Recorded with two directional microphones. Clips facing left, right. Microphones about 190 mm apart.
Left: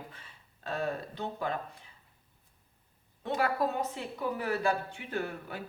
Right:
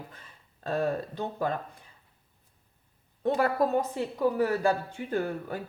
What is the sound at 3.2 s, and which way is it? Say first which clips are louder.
A woman's voice: right 5 dB; 40° right (ahead or behind).